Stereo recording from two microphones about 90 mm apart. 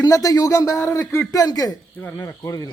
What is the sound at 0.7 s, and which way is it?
Speech, 25° left (ahead or behind).